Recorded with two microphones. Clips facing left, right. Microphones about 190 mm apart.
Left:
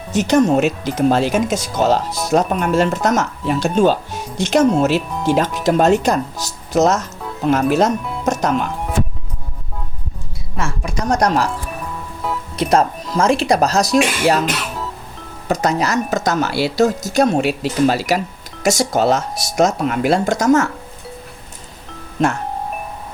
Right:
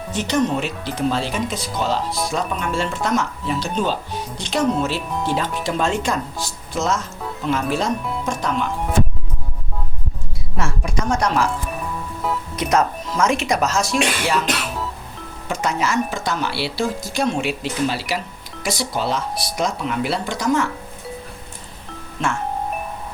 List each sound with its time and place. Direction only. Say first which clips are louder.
0.1 s speech: left 7 dB; 45° left (ahead or behind)
5.1 s speech: left 5 dB; 10° left (ahead or behind)
5.4 s speech: left 7 dB; 45° left (ahead or behind)
11.0 s speech: left 3 dB; 40° left (ahead or behind)
12.5 s speech: left 4 dB; 30° left (ahead or behind)
15.4 s speech: left 5 dB; 40° left (ahead or behind)